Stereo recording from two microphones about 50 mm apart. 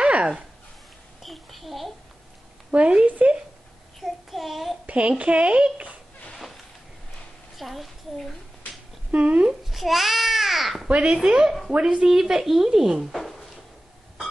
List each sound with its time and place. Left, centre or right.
0.0 s a sound: right
1.2 s child singing: centre
2.7 s speech: right
4.0 s child singing: centre
4.8 s speech: right
6.3 s a sound: centre
7.5 s a woman's voice: centre
9.1 s speech: right
9.7 s a sound: centre
10.9 s speech: centre